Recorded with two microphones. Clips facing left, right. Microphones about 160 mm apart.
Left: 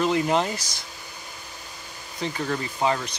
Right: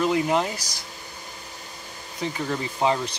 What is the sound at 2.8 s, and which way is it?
Speech, 25° right (ahead or behind).